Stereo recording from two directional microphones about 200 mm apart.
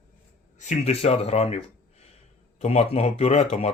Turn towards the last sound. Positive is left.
turn(degrees=30)  # may be behind; listen again after turning